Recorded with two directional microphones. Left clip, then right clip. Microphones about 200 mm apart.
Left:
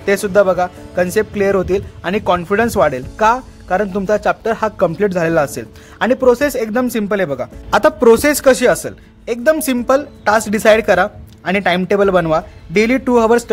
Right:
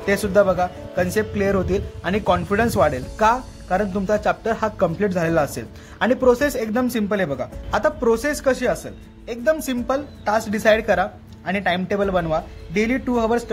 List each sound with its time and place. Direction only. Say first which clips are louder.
0.0 s speech: left 5 dB; 50° left (ahead or behind)